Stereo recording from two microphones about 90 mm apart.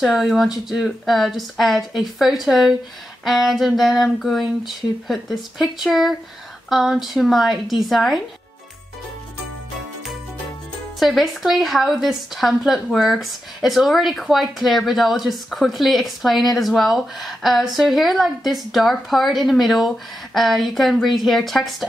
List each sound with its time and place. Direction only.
0.0 s a woman's voice: 5° right (ahead or behind)
11.0 s a woman's voice: centre (ahead or behind)